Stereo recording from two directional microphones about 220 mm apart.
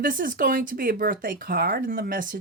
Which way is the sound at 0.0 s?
40° right (ahead or behind).